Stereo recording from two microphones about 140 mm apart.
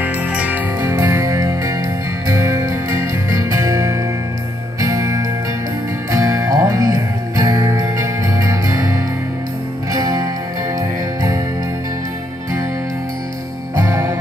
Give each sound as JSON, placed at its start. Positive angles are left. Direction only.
{"t": 0.0, "sound": "music", "side_deg": -10}
{"t": 13.7, "sound": "music", "side_deg": -20}